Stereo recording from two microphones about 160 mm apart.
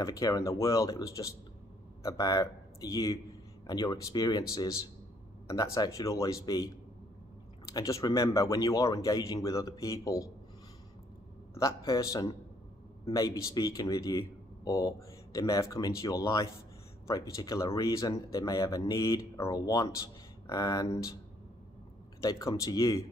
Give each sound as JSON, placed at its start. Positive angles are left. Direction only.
{"t": 0.0, "sound": "speech", "side_deg": 20}
{"t": 5.5, "sound": "speech", "side_deg": 20}
{"t": 7.7, "sound": "speech", "side_deg": 20}
{"t": 11.5, "sound": "speech", "side_deg": 20}
{"t": 22.2, "sound": "speech", "side_deg": 25}